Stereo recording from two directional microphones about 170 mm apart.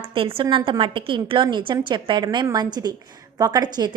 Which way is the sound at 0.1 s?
30° right (ahead or behind).